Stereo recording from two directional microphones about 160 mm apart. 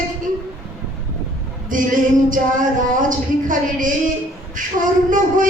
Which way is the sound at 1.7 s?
55° right (ahead or behind).